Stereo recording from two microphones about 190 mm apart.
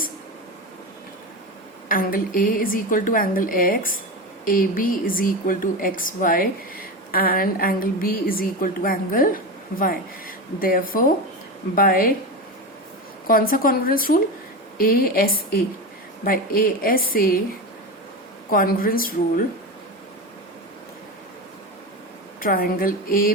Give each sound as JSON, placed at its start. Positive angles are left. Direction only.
{"t": 1.9, "sound": "a woman's voice", "side_deg": 50}
{"t": 13.2, "sound": "a woman's voice", "side_deg": 50}
{"t": 18.5, "sound": "a woman's voice", "side_deg": 50}
{"t": 22.4, "sound": "a woman's voice", "side_deg": 50}